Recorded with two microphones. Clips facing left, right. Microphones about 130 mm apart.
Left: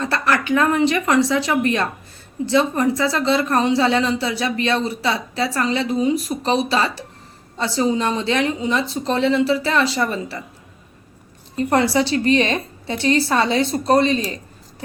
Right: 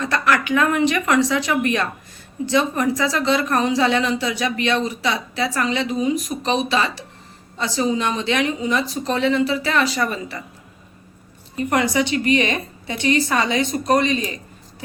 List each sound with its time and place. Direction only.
0.0 s a woman's voice: 35° left (ahead or behind)
11.5 s a woman's voice: 30° left (ahead or behind)